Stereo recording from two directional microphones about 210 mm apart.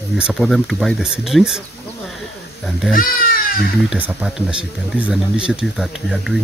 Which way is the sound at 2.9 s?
40° left (ahead or behind).